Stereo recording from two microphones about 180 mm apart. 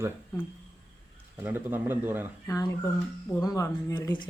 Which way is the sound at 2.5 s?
15° left (ahead or behind).